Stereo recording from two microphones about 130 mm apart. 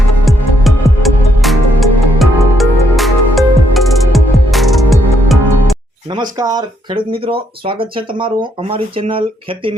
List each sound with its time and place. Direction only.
0.3 s music: centre (ahead or behind)
6.3 s speech: 30° right (ahead or behind)